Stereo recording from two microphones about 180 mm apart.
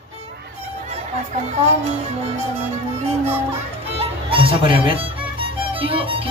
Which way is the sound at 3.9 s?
30° right (ahead or behind).